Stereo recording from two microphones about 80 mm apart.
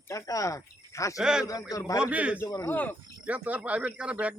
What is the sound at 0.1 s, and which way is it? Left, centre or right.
Speech, left.